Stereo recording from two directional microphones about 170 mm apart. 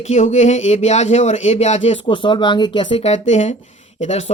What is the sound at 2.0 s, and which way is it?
Speech, 30° left (ahead or behind).